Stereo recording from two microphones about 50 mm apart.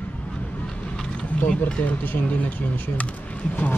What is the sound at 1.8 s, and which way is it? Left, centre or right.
Speech, left.